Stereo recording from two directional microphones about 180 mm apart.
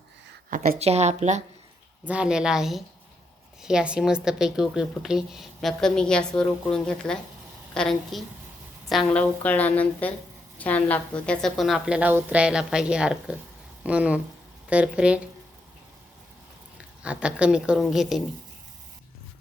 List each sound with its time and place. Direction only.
0.8 s a woman's voice: 35° right (ahead or behind)
2.0 s a woman's voice: 5° right (ahead or behind)
17.0 s a woman's voice: 5° right (ahead or behind)